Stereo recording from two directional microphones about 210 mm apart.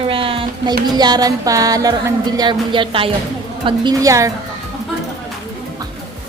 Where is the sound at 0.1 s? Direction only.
25° right (ahead or behind).